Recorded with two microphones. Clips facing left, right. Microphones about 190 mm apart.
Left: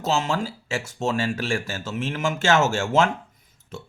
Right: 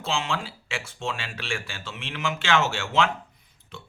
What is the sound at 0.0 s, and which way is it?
Speech, 40° left (ahead or behind).